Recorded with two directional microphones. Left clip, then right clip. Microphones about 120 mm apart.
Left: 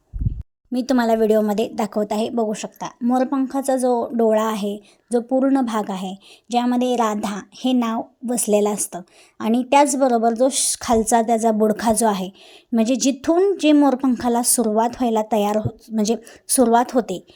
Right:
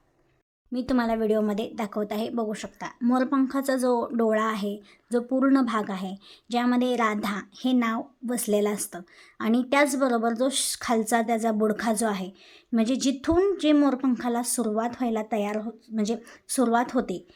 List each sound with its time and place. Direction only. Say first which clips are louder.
0.7 s a woman's voice: left 7 dB; 60° left (ahead or behind); by 2.9 s 35° left (ahead or behind)
3.1 s a woman's voice: left 4 dB; 20° left (ahead or behind); by 13.3 s 35° left (ahead or behind)
13.3 s a woman's voice: left 5 dB; 25° left (ahead or behind)
13.6 s a woman's voice: left 6 dB; 40° left (ahead or behind)